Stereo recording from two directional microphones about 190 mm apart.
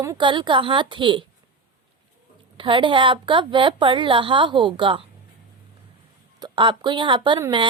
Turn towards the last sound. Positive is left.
turn(degrees=-25)  # may be behind; listen again after turning